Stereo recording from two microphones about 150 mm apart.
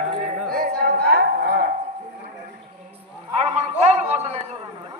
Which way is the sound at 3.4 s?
45° right (ahead or behind).